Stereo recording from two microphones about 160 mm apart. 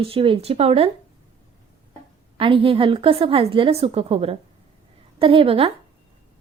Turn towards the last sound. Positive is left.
turn(degrees=-35)  # may be behind; listen again after turning